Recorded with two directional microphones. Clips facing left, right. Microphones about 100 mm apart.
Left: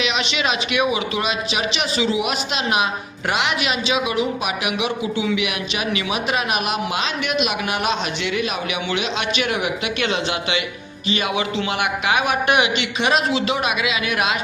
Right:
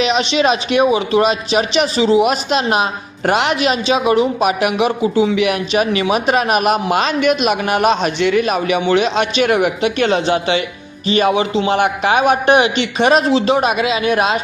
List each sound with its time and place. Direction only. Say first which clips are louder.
0.0 s a man's voice: right 8 dB; 35° right (ahead or behind)